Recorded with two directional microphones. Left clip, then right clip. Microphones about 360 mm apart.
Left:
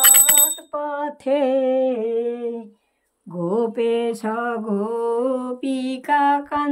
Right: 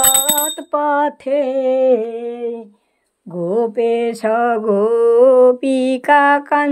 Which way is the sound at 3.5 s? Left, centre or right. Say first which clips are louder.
Right 4 dB; centre.